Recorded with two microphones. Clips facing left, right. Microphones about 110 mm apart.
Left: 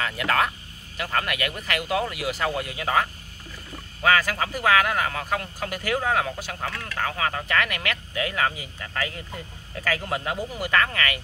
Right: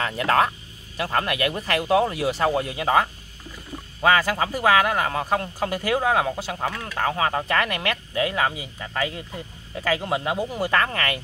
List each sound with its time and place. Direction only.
0.0 s speech: 35° right (ahead or behind); by 7.0 s 15° right (ahead or behind)
7.0 s speech: 30° right (ahead or behind)
10.5 s speech: 30° right (ahead or behind)